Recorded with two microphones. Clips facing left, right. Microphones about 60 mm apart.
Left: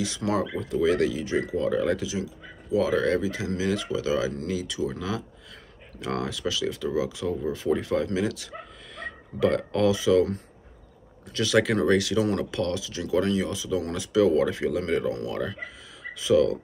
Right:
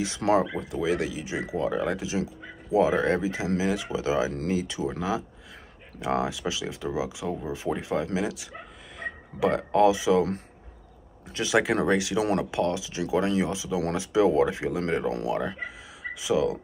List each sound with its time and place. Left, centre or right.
0.0 s speech: right
0.7 s speech: centre
11.2 s speech: centre